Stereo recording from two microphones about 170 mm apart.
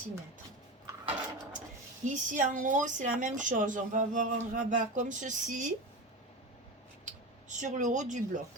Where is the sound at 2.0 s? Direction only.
50° right (ahead or behind).